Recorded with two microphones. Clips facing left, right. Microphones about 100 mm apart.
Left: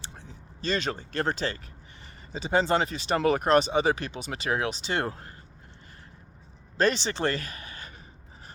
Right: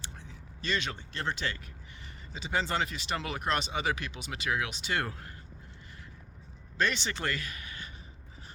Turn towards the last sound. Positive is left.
turn(degrees=35)  # may be behind; listen again after turning